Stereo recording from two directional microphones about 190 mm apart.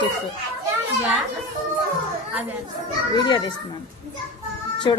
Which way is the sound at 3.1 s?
25° left (ahead or behind).